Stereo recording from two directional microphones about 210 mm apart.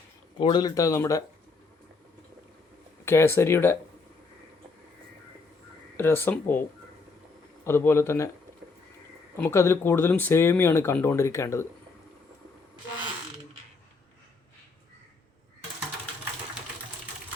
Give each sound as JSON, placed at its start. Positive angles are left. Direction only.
{"t": 0.3, "sound": "speech", "side_deg": 20}
{"t": 3.0, "sound": "speech", "side_deg": 10}
{"t": 6.0, "sound": "speech", "side_deg": 10}
{"t": 9.4, "sound": "speech", "side_deg": 10}